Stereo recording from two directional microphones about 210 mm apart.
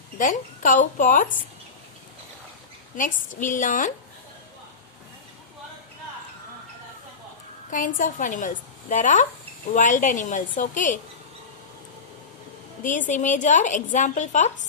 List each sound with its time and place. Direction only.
0.2 s a woman's voice: 40° left (ahead or behind)
2.9 s a woman's voice: 40° left (ahead or behind)
7.7 s a woman's voice: 40° left (ahead or behind)
12.8 s a woman's voice: 35° left (ahead or behind)